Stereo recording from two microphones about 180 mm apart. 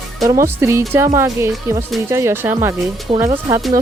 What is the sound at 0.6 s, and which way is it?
Speech, 15° right (ahead or behind).